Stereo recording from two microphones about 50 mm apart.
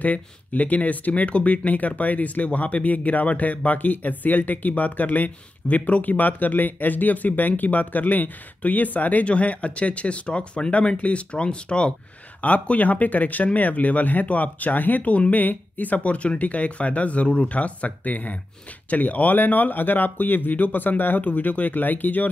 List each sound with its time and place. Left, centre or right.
0.0 s speech: left